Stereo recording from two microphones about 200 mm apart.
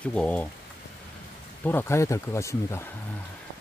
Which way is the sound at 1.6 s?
10° left (ahead or behind).